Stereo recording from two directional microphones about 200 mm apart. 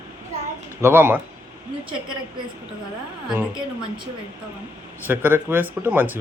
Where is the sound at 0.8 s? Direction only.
10° right (ahead or behind).